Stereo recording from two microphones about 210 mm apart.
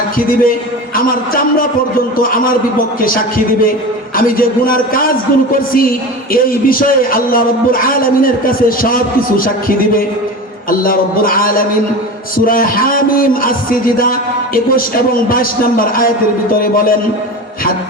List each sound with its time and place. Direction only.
0.9 s a man's voice: 45° left (ahead or behind)